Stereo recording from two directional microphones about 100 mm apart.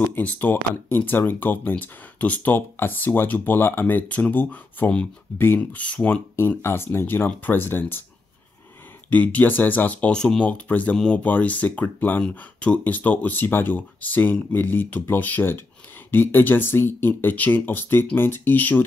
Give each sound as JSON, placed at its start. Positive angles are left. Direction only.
{"t": 0.1, "sound": "speech", "side_deg": 15}
{"t": 6.3, "sound": "speech", "side_deg": 25}
{"t": 9.1, "sound": "speech", "side_deg": 15}